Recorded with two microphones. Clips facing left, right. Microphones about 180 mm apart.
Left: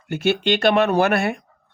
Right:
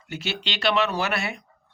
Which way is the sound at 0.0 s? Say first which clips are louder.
Left 11 dB; 55° left (ahead or behind).